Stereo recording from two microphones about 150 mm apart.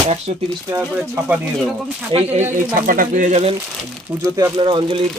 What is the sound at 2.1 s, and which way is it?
Speech, 45° right (ahead or behind).